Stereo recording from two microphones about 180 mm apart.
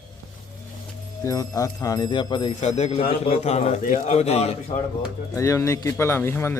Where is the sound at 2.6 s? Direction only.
40° left (ahead or behind).